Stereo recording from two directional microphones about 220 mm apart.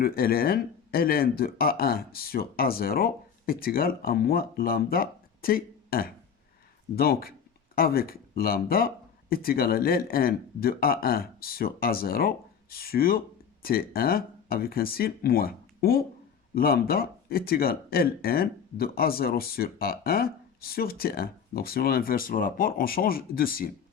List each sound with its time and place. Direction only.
0.0 s speech: 40° left (ahead or behind)